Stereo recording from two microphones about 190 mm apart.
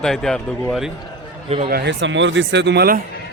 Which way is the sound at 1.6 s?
60° right (ahead or behind).